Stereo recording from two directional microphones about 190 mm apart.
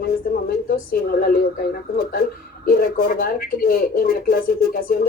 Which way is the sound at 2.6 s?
50° left (ahead or behind).